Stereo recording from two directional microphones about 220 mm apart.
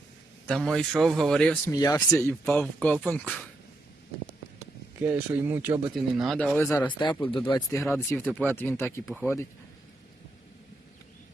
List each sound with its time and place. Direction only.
0.4 s a man's voice: centre (ahead or behind)
1.7 s speech: 15° left (ahead or behind)
5.0 s speech: 10° right (ahead or behind); by 9.5 s 10° left (ahead or behind)